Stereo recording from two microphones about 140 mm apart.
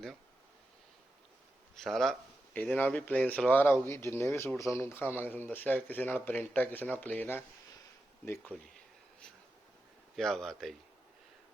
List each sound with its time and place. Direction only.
1.7 s speech: centre (ahead or behind)
10.2 s speech: 5° left (ahead or behind)